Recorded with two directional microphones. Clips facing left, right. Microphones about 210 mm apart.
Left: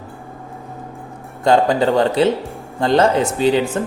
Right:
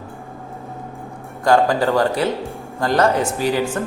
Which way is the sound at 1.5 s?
20° left (ahead or behind).